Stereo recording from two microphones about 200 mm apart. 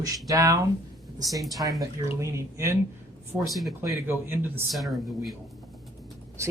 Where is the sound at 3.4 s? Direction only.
Centre (ahead or behind).